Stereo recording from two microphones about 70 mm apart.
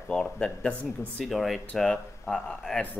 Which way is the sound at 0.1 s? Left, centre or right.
Centre.